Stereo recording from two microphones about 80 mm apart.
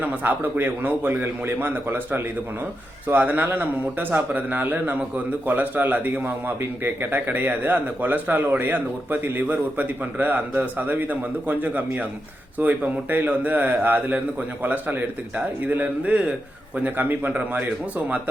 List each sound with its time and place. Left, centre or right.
0.0 s a man's voice: centre